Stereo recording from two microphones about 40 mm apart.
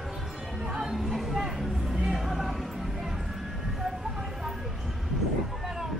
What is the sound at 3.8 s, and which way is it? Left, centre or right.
Vehicle, centre.